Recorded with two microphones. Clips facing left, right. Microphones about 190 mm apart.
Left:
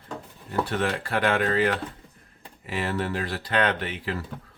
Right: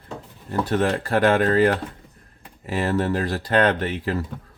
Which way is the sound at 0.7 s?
40° right (ahead or behind).